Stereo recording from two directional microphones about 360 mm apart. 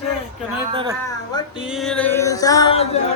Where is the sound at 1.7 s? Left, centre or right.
Centre.